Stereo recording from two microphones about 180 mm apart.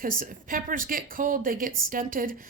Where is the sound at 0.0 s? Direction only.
50° right (ahead or behind).